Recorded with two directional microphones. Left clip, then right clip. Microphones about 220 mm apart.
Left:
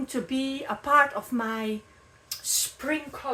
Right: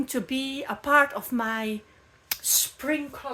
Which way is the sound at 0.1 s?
50° right (ahead or behind).